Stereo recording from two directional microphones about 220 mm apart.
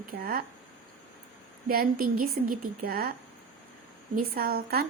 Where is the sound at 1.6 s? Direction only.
40° right (ahead or behind).